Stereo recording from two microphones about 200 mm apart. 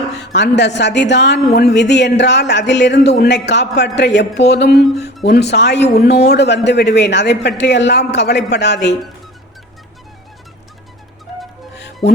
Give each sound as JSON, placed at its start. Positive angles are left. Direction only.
{"t": 0.3, "sound": "a man's voice", "side_deg": 60}